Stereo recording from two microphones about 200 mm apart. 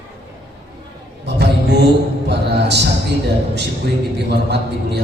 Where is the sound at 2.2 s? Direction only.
60° right (ahead or behind).